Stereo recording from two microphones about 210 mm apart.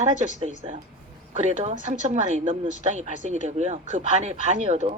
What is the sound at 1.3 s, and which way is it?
Speech, 35° right (ahead or behind).